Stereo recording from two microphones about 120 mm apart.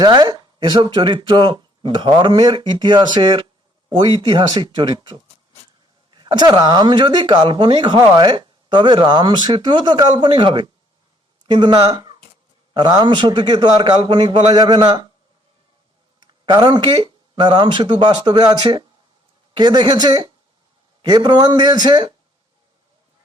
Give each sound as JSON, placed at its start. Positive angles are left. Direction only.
{"t": 0.0, "sound": "speech", "side_deg": -40}
{"t": 16.2, "sound": "speech", "side_deg": -40}